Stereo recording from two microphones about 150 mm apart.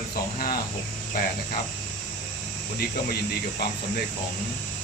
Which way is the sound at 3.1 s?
90° left.